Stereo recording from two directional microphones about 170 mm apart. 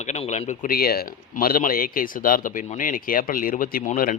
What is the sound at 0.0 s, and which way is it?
Speech, 40° left (ahead or behind).